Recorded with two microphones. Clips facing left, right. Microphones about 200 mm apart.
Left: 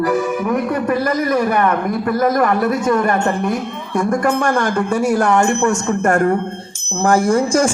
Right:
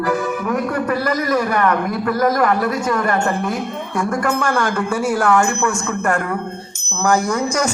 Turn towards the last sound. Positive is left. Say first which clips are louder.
# left 5 dB
turn(degrees=30)  # may be behind; listen again after turning